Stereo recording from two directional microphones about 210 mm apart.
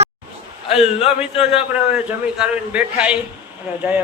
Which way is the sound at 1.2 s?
5° right (ahead or behind).